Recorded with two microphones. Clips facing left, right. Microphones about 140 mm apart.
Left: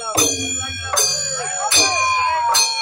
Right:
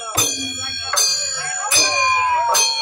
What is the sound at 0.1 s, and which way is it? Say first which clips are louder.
Music: left 6 dB; 40° left (ahead or behind).